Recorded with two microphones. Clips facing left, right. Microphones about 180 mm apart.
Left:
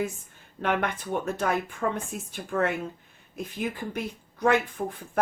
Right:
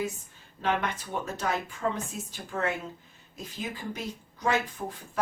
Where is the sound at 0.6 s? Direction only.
55° left (ahead or behind).